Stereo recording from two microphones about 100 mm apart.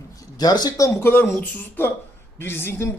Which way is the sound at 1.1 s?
20° left (ahead or behind).